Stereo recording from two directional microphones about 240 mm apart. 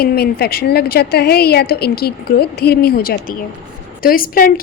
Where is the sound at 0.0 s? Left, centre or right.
Left.